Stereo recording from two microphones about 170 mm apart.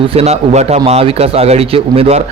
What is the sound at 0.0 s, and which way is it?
A man's voice, 35° right (ahead or behind).